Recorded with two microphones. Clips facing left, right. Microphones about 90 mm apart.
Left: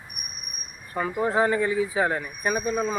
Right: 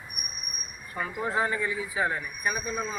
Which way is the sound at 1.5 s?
45° left (ahead or behind).